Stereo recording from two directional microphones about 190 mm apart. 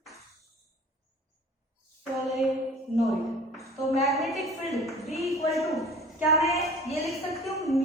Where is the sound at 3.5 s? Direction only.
Centre (ahead or behind).